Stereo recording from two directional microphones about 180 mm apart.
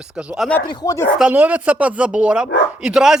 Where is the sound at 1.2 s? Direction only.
10° right (ahead or behind).